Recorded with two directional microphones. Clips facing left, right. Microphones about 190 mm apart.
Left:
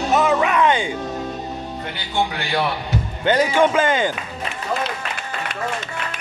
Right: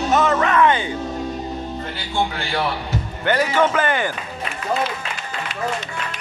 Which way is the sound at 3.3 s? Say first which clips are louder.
Left 2 dB; 15° left (ahead or behind).